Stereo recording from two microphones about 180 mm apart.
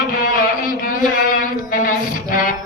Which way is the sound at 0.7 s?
50° left (ahead or behind).